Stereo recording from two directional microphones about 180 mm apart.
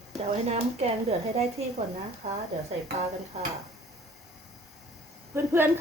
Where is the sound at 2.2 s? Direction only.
40° right (ahead or behind).